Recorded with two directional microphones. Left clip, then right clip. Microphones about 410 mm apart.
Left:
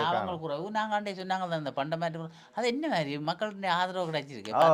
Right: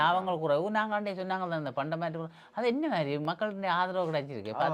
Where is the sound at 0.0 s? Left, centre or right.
Right.